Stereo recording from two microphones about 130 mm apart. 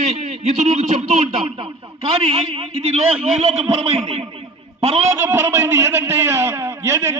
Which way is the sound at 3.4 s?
55° right (ahead or behind).